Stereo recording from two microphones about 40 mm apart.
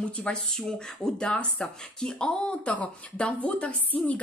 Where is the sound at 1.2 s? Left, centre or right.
Centre.